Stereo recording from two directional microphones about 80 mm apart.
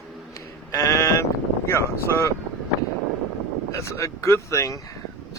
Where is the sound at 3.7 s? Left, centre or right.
Left.